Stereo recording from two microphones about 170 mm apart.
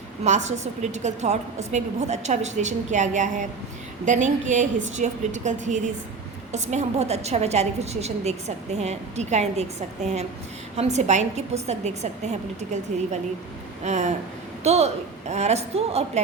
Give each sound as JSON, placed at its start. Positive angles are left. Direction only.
{"t": 0.3, "sound": "a woman's voice", "side_deg": -40}